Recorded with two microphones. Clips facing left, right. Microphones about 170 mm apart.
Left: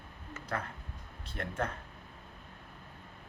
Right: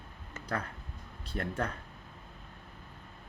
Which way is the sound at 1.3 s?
35° right (ahead or behind).